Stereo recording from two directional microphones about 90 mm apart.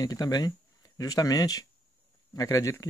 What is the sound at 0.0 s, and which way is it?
Speech, 45° left (ahead or behind).